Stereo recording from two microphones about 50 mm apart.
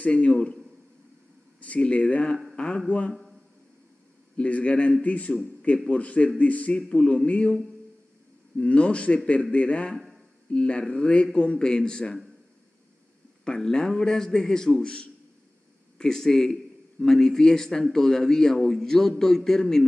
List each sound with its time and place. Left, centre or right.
0.0 s a man's voice: left
1.6 s speech: left
4.4 s a man's voice: left
8.5 s a man's voice: left
13.4 s a man's voice: centre